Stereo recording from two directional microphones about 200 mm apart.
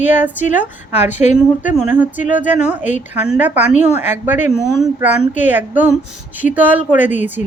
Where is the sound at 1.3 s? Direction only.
5° right (ahead or behind).